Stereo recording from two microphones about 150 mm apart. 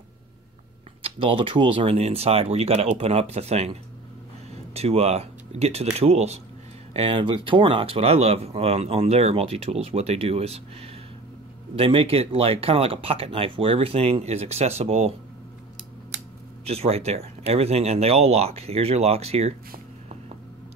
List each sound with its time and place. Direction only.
1.0 s speech: 35° right (ahead or behind)
16.6 s speech: 45° right (ahead or behind)